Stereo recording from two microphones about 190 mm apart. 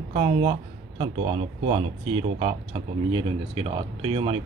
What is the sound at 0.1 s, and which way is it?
Speech, 30° right (ahead or behind).